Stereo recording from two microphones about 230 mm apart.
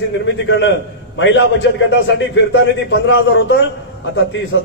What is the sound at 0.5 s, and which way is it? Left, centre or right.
A man's voice, left.